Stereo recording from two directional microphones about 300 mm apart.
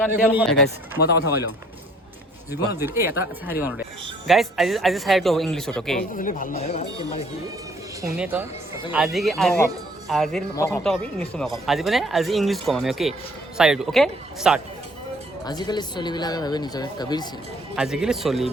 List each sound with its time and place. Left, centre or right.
0.1 s speech: centre
2.8 s speech: centre
6.0 s speech: left
8.0 s speech: centre
15.4 s speech: centre
17.7 s speech: centre